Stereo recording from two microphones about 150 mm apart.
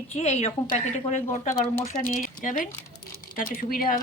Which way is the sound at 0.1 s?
50° left (ahead or behind).